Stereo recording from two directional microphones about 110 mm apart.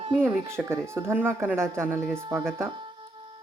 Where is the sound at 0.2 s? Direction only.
20° right (ahead or behind).